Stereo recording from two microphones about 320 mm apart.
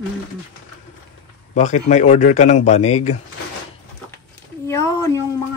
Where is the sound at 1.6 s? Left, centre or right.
Left.